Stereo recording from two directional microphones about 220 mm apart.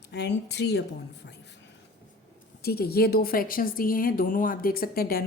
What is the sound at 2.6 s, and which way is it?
A woman's voice, 45° left (ahead or behind).